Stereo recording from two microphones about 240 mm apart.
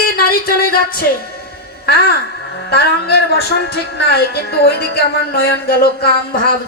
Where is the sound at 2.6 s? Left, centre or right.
Left.